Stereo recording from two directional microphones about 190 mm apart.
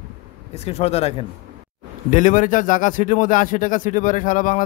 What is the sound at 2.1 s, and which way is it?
A man's voice, 45° left (ahead or behind).